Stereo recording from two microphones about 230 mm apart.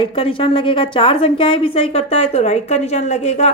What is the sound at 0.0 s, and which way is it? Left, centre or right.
A woman's voice, left.